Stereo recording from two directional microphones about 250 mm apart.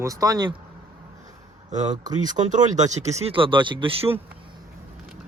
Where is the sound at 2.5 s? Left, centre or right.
Right.